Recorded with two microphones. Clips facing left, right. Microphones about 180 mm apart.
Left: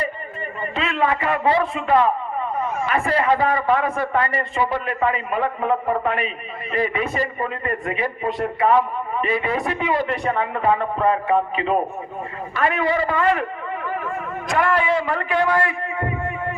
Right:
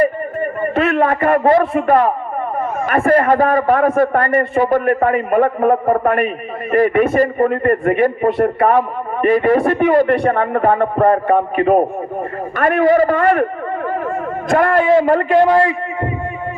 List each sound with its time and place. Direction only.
0.0 s a man's voice: 55° right (ahead or behind)
14.5 s a man's voice: 50° right (ahead or behind)
15.5 s a man's voice: 20° right (ahead or behind)